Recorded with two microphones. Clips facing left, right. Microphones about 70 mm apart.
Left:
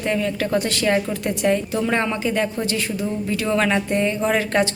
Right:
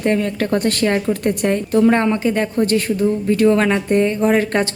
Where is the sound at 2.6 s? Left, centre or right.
Right.